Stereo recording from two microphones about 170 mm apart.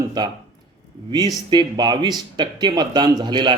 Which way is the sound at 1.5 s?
25° right (ahead or behind).